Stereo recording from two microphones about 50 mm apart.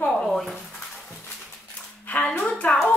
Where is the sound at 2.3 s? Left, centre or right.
Left.